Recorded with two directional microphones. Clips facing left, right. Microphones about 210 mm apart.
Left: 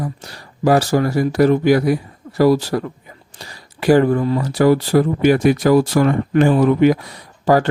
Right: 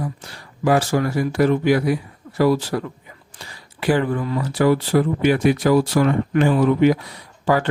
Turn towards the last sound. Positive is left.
turn(degrees=40)  # may be behind; listen again after turning